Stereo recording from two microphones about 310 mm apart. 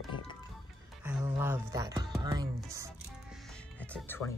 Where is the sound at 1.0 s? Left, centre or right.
Centre.